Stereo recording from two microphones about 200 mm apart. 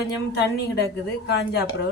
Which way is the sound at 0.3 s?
55° left (ahead or behind).